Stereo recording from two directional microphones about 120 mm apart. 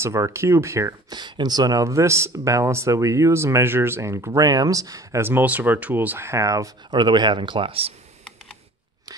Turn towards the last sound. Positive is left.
turn(degrees=-50)  # may be behind; listen again after turning